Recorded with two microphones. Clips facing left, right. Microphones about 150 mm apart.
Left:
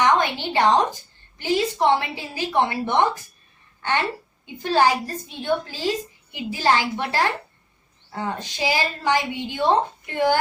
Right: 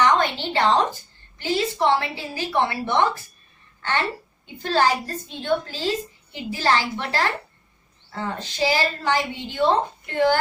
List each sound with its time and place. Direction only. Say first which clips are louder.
0.0 s a woman's voice: even; 15° left (ahead or behind)